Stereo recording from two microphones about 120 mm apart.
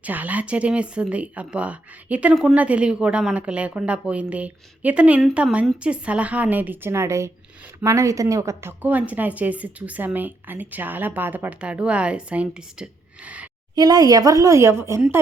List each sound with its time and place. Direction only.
0.0 s a woman's voice: 15° right (ahead or behind)
8.8 s a woman's voice: 15° right (ahead or behind)
13.7 s a woman's voice: 35° right (ahead or behind)